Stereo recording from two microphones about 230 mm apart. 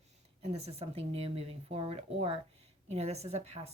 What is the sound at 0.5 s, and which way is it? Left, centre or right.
Speech, right.